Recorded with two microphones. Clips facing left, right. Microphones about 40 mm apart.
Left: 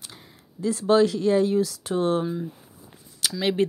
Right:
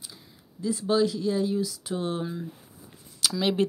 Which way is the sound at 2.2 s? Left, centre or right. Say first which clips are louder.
Left 5 dB; centre.